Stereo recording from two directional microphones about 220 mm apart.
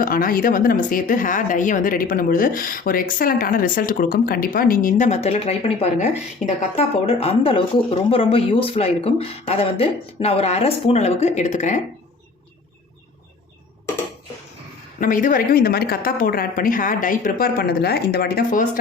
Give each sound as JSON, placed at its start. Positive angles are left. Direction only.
{"t": 0.0, "sound": "speech", "side_deg": 40}
{"t": 15.0, "sound": "speech", "side_deg": 40}